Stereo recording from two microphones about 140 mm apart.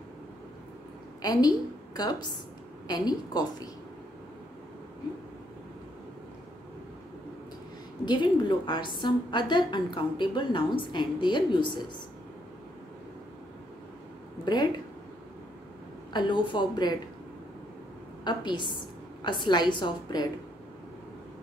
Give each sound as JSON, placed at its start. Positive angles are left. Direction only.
{"t": 1.2, "sound": "a woman's voice", "side_deg": 25}
{"t": 8.0, "sound": "a woman's voice", "side_deg": 30}
{"t": 14.4, "sound": "speech", "side_deg": 30}
{"t": 16.1, "sound": "a woman's voice", "side_deg": 30}
{"t": 18.2, "sound": "a woman's voice", "side_deg": 30}